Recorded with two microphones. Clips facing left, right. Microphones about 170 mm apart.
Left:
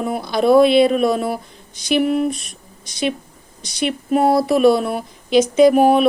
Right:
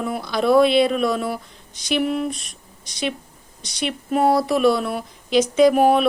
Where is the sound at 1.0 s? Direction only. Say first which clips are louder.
Left 4 dB; 50° left (ahead or behind).